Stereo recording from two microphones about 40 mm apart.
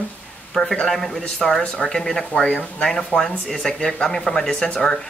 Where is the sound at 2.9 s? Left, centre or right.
Centre.